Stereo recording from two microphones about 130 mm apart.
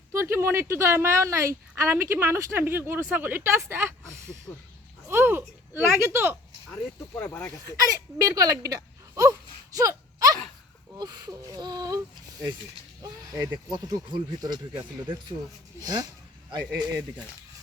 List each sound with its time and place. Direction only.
0.1 s speech: 20° right (ahead or behind)
4.5 s speech: 25° left (ahead or behind)
5.0 s speech: 15° right (ahead or behind)
7.2 s speech: 20° left (ahead or behind)
7.6 s speech: 25° right (ahead or behind)
9.7 s a sound: 25° right (ahead or behind)
10.9 s speech: 30° right (ahead or behind)
13.0 s speech: 25° right (ahead or behind)